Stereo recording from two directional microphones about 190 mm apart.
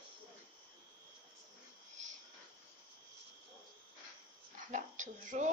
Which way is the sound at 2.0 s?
40° right (ahead or behind).